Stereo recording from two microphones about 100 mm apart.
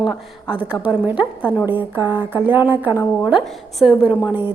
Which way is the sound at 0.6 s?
15° right (ahead or behind).